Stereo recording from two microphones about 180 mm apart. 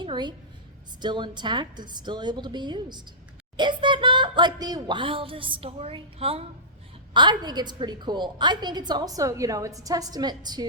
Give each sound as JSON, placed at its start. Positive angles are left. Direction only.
{"t": 0.0, "sound": "a woman's voice", "side_deg": -25}